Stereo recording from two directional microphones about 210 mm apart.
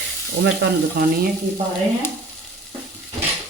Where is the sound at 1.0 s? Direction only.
45° right (ahead or behind).